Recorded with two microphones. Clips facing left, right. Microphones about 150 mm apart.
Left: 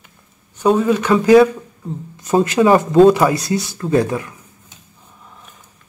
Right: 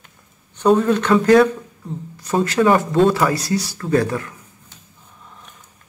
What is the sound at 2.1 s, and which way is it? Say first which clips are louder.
Speech: left 3 dB; 20° left (ahead or behind).